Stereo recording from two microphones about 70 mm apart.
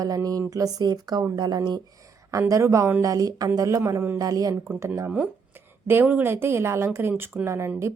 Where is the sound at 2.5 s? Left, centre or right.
Right.